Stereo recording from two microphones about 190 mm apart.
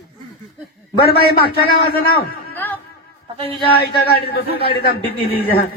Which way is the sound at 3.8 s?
55° left (ahead or behind).